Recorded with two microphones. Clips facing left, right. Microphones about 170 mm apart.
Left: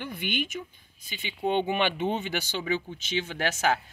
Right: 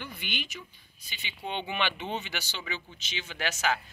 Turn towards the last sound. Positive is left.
turn(degrees=50)  # may be behind; listen again after turning